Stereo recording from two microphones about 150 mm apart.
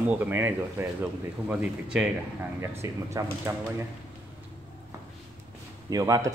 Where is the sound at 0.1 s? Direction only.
15° right (ahead or behind).